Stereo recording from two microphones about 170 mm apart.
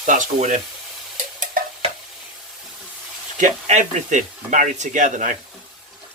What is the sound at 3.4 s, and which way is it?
Speech, 45° right (ahead or behind).